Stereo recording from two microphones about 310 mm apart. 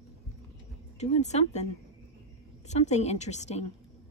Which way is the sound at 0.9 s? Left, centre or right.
Left.